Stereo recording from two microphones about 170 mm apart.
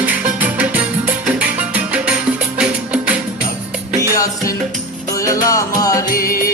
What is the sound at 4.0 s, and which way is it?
Music, 20° left (ahead or behind).